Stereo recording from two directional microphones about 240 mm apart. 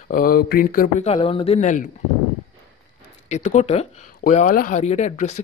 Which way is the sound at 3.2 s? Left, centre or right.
Left.